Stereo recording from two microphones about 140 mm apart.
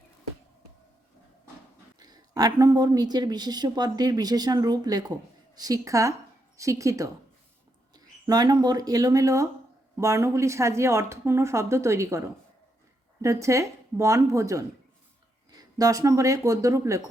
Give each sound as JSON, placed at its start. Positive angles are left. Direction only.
{"t": 2.0, "sound": "a woman's voice", "side_deg": -30}
{"t": 13.2, "sound": "a woman's voice", "side_deg": -20}